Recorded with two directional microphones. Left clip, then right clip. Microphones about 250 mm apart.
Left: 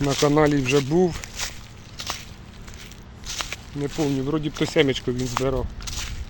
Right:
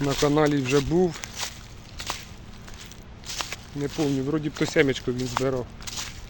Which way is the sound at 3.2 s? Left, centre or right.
Centre.